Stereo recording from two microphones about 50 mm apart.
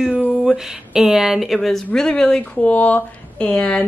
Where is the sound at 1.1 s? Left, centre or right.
Centre.